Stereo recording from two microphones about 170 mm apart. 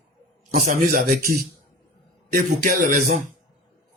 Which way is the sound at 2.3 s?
50° right (ahead or behind).